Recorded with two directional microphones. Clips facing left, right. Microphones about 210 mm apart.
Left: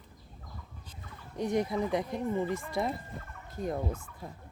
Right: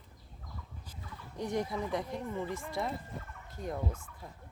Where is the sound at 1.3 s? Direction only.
20° left (ahead or behind).